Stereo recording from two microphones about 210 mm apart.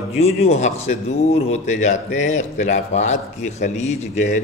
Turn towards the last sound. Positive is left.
turn(degrees=35)  # may be behind; listen again after turning